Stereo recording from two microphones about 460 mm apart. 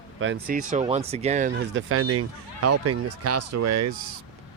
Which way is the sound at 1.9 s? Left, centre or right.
Right.